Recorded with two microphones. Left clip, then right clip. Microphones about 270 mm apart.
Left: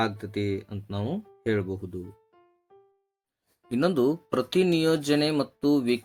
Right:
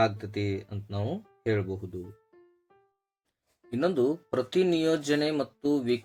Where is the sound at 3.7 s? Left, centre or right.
Left.